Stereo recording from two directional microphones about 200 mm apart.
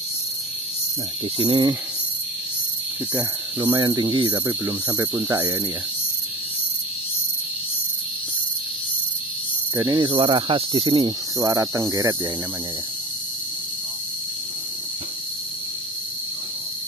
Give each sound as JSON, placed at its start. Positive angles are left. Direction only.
{"t": 1.4, "sound": "speech", "side_deg": -25}
{"t": 3.5, "sound": "speech", "side_deg": -25}
{"t": 9.8, "sound": "speech", "side_deg": -20}